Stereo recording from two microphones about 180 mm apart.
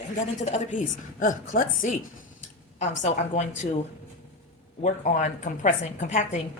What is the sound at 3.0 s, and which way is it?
Speech, 40° left (ahead or behind).